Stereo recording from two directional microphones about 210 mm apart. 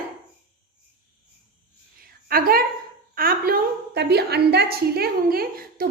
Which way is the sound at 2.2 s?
45° right (ahead or behind).